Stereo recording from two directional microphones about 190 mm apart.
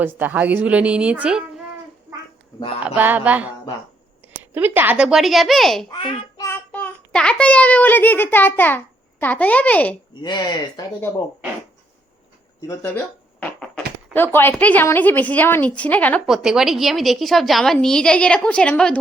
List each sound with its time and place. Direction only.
0.0 s a woman's voice: 10° right (ahead or behind)
2.8 s a woman's voice: 10° right (ahead or behind)
4.5 s a woman's voice: 10° right (ahead or behind)
5.9 s a child's voice: 25° left (ahead or behind); by 9.9 s 10° left (ahead or behind)
10.2 s speech: 20° left (ahead or behind)
12.6 s speech: 10° left (ahead or behind)
13.4 s a sound: 10° left (ahead or behind)
14.1 s a woman's voice: 10° left (ahead or behind)